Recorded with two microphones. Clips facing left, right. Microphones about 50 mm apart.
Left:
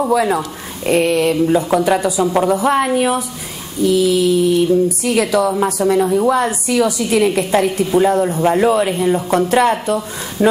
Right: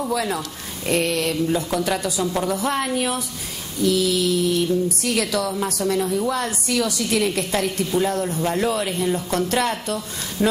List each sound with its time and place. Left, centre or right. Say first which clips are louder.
0.1 s a woman's voice: left 9 dB; centre